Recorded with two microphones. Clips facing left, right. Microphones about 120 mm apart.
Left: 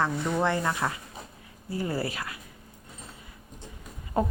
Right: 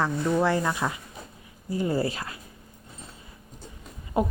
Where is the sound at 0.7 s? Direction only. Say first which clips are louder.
Right 1 dB; 20° right (ahead or behind).